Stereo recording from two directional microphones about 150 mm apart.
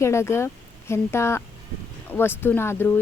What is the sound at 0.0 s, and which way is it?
Speech, 20° left (ahead or behind).